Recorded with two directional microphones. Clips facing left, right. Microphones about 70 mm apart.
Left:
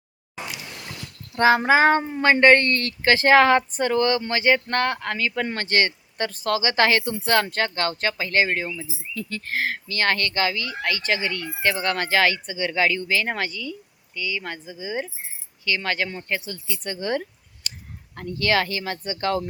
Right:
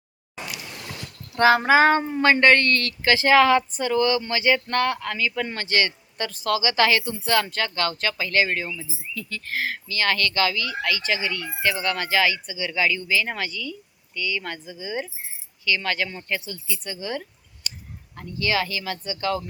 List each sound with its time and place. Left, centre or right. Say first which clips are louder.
1.4 s speech: even; left
14.2 s speech: right 1 dB; centre; by 16.8 s left
16.8 s speech: left 6 dB; left
18.8 s speech: left 1 dB; left